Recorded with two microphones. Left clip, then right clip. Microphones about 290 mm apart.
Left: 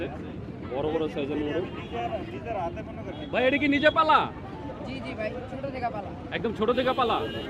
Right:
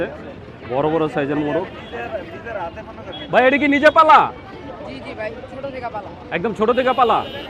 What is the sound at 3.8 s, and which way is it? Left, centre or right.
Speech, right.